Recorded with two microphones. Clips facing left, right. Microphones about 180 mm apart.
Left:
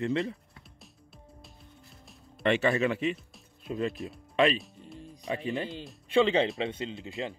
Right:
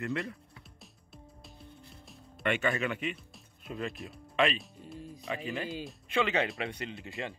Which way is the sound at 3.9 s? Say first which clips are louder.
Left 5 dB; centre (ahead or behind).